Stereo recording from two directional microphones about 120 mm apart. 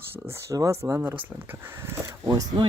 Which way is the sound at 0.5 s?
30° right (ahead or behind).